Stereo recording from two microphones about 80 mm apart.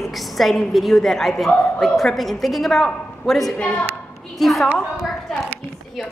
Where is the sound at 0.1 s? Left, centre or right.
Centre.